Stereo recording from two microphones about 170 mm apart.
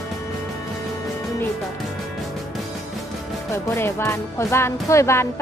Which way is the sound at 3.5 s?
15° left (ahead or behind).